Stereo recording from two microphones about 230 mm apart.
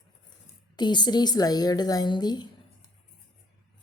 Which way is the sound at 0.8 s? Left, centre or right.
Centre.